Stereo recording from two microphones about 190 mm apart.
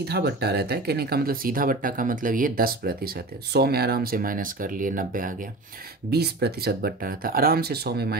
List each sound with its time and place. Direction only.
0.0 s speech: 55° right (ahead or behind)
6.0 s speech: 60° right (ahead or behind)